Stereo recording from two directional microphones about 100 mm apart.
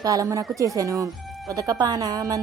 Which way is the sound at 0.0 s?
35° right (ahead or behind).